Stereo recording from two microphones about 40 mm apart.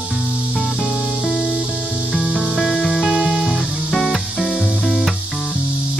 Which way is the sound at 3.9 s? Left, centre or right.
Centre.